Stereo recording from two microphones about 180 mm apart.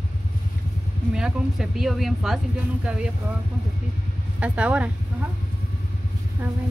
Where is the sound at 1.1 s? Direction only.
5° right (ahead or behind).